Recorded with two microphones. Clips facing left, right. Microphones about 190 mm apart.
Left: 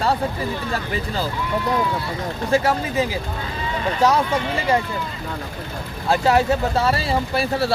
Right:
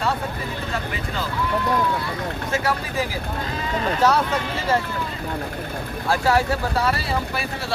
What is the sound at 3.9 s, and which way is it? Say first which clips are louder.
Speech: left 2 dB; 10° left (ahead or behind).